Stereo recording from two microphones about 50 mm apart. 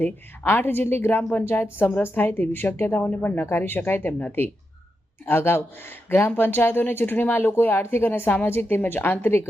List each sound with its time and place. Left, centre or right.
0.0 s speech: left
3.0 s speech: left
3.5 s speech: left
9.2 s speech: left